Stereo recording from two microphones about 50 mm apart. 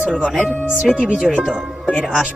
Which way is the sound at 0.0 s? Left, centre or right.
Right.